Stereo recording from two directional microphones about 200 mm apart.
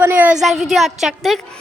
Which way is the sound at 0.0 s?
10° right (ahead or behind).